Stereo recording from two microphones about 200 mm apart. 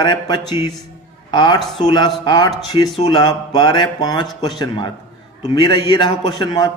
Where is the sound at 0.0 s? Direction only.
20° left (ahead or behind).